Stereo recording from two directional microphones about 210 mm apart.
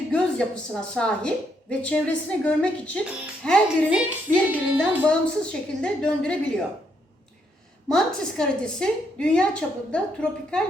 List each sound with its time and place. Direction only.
0.1 s a woman's voice: 5° left (ahead or behind)
4.8 s a woman's voice: 5° left (ahead or behind)
7.9 s a woman's voice: 5° left (ahead or behind)